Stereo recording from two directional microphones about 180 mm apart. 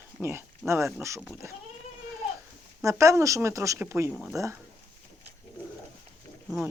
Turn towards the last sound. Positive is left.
turn(degrees=0)  # may be behind; listen again after turning